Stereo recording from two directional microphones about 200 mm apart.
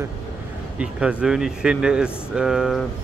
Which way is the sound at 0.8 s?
5° right (ahead or behind).